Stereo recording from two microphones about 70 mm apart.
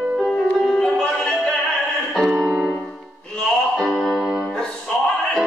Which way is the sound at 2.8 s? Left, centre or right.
Centre.